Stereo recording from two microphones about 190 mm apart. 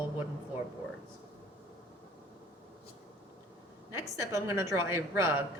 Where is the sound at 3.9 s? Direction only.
15° right (ahead or behind).